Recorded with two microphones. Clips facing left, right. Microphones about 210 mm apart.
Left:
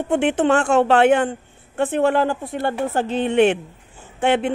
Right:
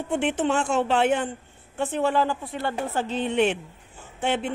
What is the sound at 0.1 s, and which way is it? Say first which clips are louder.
A man's voice: left 6 dB; 60° left (ahead or behind).